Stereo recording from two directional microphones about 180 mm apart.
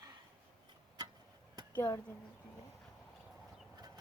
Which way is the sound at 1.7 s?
15° left (ahead or behind).